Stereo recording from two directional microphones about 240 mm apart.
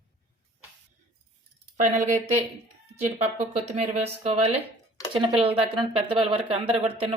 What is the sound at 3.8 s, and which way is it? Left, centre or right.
Speech, right.